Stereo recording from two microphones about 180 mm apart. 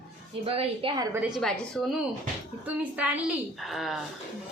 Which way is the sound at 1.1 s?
10° right (ahead or behind).